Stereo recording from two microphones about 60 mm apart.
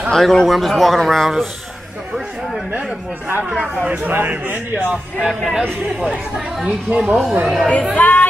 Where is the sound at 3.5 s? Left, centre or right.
Centre.